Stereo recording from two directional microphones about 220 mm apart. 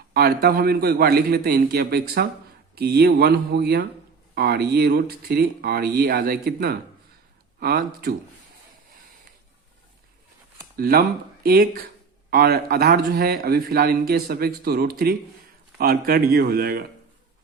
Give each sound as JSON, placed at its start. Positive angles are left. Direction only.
{"t": 0.1, "sound": "a man's voice", "side_deg": -45}
{"t": 10.8, "sound": "a man's voice", "side_deg": -45}